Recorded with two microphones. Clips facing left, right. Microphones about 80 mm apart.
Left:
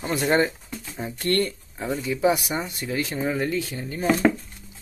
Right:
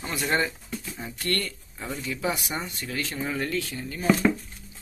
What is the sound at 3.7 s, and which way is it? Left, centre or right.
Speech, left.